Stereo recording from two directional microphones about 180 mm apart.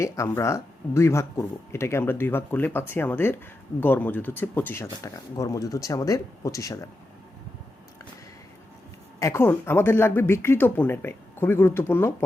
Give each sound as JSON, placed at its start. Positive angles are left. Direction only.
{"t": 0.0, "sound": "speech", "side_deg": 15}
{"t": 9.1, "sound": "speech", "side_deg": 15}